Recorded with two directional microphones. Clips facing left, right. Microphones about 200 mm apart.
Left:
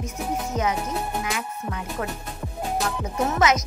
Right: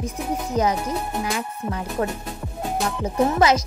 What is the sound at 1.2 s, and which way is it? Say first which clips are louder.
Music: right 3 dB; 35° right (ahead or behind).